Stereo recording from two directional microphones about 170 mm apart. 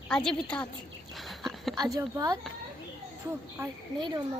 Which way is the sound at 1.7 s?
25° right (ahead or behind).